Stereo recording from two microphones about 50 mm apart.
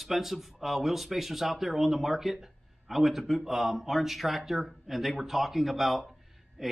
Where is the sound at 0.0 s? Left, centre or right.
Centre.